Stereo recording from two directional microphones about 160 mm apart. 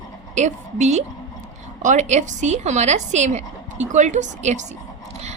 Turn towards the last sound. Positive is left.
turn(degrees=-45)  # may be behind; listen again after turning